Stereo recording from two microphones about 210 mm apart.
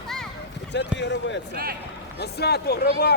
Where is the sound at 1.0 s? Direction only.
55° left (ahead or behind).